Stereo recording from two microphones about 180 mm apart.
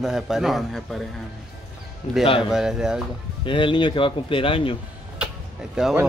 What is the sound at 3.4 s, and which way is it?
Speech, 30° left (ahead or behind).